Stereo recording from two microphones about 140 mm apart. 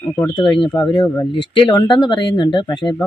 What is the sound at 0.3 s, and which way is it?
Speech, 35° left (ahead or behind).